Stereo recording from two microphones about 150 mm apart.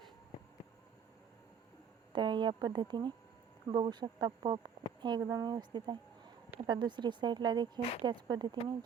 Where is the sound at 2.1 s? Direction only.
30° right (ahead or behind).